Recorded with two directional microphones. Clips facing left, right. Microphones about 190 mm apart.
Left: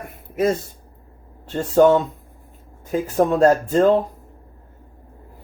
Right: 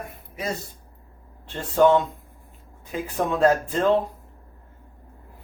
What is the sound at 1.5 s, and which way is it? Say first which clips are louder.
Speech: left 4 dB; 45° left (ahead or behind).